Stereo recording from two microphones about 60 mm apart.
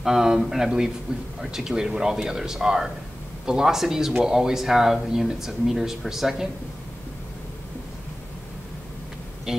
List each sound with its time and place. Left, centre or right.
0.0 s speech: centre
9.5 s speech: centre